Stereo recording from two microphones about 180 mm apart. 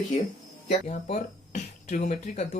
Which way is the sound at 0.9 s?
40° left (ahead or behind).